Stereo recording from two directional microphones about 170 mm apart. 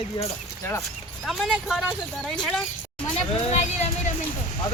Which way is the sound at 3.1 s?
45° left (ahead or behind).